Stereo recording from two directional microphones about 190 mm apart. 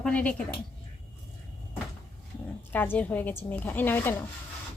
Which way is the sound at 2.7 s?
10° left (ahead or behind).